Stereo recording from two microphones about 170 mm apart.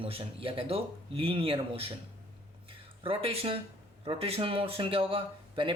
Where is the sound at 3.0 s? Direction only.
35° right (ahead or behind).